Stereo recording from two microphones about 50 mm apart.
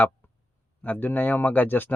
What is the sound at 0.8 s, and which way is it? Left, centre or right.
Speech, left.